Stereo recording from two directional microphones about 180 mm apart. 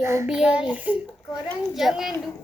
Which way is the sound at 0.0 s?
15° right (ahead or behind).